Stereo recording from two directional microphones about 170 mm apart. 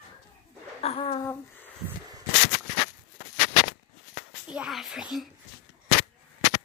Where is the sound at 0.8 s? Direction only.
35° left (ahead or behind).